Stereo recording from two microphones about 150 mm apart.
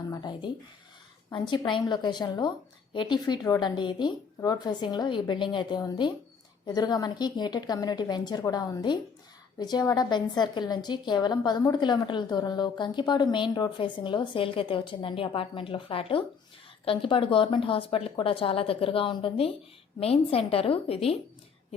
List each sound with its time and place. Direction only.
0.1 s a woman's voice: 30° left (ahead or behind)